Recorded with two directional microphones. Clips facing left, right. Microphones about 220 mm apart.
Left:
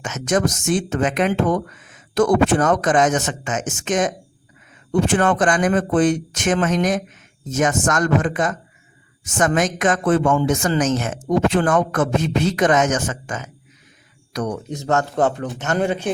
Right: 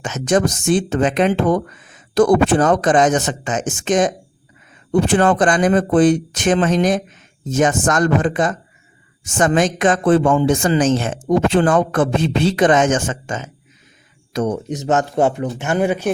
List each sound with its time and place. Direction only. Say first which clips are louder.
0.0 s speech: right 3 dB; 30° right (ahead or behind)
9.6 s a man's voice: right 3 dB; 30° right (ahead or behind); by 16.1 s 10° right (ahead or behind)